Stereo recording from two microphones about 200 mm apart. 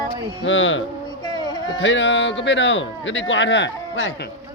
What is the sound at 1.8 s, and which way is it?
Speech, 65° left (ahead or behind).